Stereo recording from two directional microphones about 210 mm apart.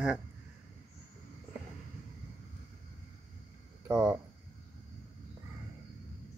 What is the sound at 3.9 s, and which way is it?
Speech, 15° right (ahead or behind).